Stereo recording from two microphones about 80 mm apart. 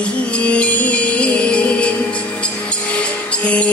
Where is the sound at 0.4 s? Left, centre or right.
Centre.